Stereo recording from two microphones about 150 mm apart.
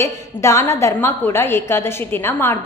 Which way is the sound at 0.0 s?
20° left (ahead or behind).